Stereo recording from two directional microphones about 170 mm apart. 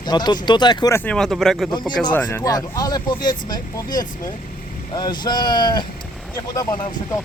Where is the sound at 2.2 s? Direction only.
20° left (ahead or behind).